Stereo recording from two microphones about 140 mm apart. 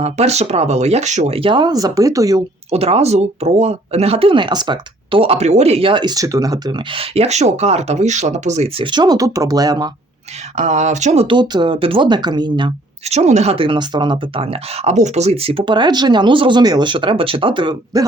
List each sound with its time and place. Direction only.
0.0 s speech: 50° right (ahead or behind); by 2.4 s 25° right (ahead or behind)
2.6 s speech: 45° right (ahead or behind); by 9.9 s 30° right (ahead or behind)
10.5 s speech: 55° right (ahead or behind)
11.3 s speech: 35° right (ahead or behind)
13.1 s speech: 55° right (ahead or behind); by 18.0 s 35° right (ahead or behind)